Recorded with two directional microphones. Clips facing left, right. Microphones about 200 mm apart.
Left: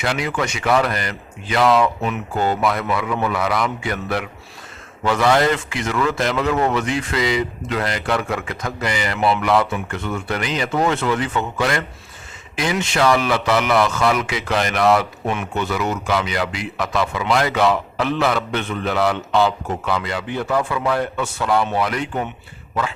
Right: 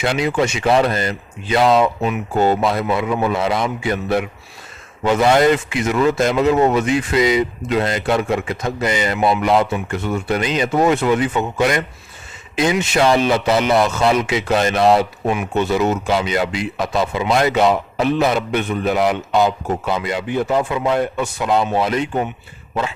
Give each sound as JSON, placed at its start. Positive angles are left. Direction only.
{"t": 0.0, "sound": "speech", "side_deg": -25}